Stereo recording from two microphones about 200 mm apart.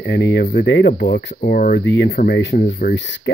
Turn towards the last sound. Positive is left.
turn(degrees=60)  # may be behind; listen again after turning